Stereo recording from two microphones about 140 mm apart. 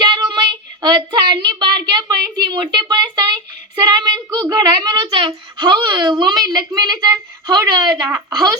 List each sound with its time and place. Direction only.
0.0 s child singing: 30° right (ahead or behind)